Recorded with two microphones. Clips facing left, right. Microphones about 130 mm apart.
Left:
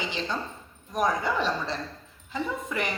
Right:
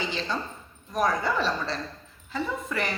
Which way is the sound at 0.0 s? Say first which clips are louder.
Right 1 dB; 15° left (ahead or behind).